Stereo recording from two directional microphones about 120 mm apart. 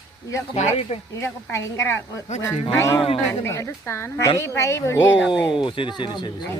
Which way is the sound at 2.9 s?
55° left (ahead or behind).